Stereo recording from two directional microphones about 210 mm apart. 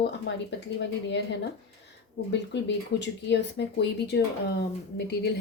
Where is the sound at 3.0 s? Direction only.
55° left (ahead or behind).